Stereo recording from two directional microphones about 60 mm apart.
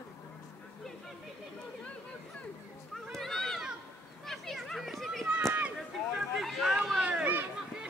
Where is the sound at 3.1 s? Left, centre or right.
Centre.